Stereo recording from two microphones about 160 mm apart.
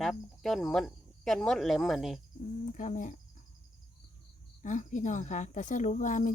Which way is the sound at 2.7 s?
50° left (ahead or behind).